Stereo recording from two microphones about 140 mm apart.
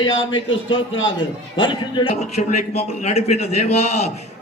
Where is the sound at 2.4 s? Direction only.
60° left (ahead or behind).